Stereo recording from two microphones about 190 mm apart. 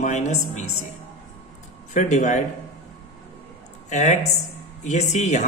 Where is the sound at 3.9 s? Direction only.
35° left (ahead or behind).